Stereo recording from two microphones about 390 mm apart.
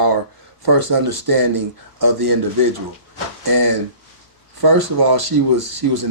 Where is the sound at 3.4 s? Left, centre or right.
Right.